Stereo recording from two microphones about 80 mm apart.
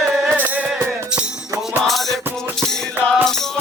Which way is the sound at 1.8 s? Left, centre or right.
Centre.